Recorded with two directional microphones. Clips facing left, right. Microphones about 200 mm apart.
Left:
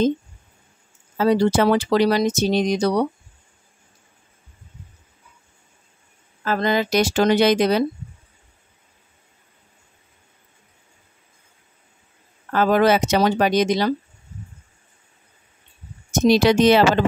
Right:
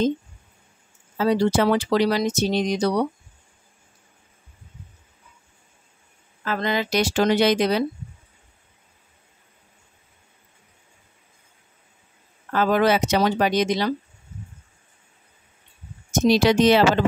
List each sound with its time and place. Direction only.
1.1 s speech: 45° left (ahead or behind)
6.4 s speech: 40° left (ahead or behind)
12.5 s speech: 45° left (ahead or behind)
16.1 s speech: 50° left (ahead or behind)